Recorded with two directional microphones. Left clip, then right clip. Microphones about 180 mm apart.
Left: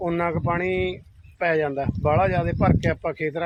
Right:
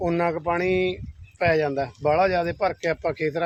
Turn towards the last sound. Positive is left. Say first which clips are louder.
# right 1 dB
turn(degrees=-15)  # may be behind; listen again after turning